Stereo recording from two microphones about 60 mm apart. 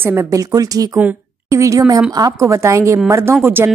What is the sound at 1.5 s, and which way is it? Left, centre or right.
A woman's voice, right.